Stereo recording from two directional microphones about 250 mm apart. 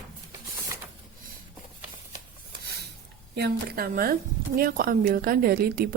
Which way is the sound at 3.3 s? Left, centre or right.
Right.